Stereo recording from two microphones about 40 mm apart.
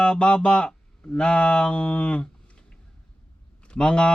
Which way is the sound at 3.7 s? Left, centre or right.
Left.